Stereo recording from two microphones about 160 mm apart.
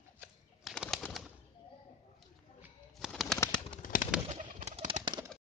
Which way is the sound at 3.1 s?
5° left (ahead or behind).